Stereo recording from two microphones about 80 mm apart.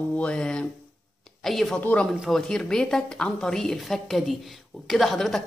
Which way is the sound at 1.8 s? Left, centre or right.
Centre.